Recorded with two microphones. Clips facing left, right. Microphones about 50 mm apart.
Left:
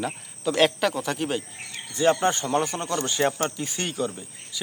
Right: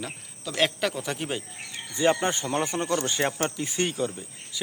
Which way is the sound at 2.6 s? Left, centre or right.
Right.